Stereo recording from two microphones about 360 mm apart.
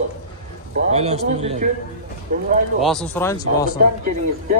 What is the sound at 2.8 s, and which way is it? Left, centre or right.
Speech, centre.